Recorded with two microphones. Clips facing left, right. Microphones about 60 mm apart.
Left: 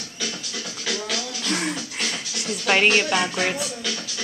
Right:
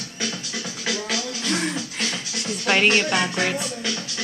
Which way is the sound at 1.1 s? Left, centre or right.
Centre.